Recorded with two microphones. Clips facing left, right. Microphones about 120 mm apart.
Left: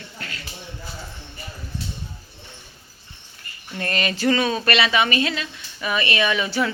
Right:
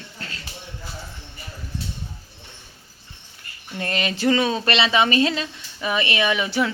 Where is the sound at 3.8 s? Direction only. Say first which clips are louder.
Even; 15° right (ahead or behind).